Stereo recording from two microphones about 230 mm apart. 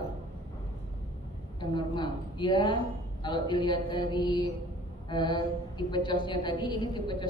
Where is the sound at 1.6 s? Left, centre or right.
Centre.